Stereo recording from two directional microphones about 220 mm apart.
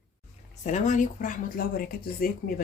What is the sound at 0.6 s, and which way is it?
A woman's voice, 35° left (ahead or behind).